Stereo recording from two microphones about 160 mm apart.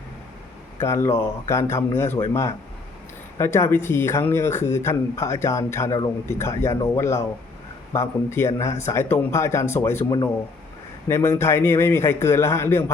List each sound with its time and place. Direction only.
0.8 s speech: 15° left (ahead or behind)
11.1 s speech: 15° left (ahead or behind)